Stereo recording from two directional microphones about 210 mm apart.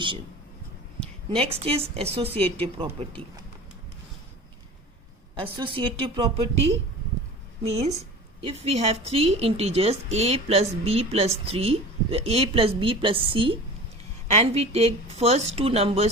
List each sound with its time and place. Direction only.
1.3 s a woman's voice: 25° right (ahead or behind)
5.3 s a woman's voice: 20° right (ahead or behind)
7.9 s a woman's voice: 25° right (ahead or behind)